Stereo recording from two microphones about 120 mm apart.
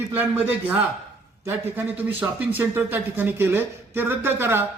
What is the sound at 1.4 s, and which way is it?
Speech, 20° right (ahead or behind).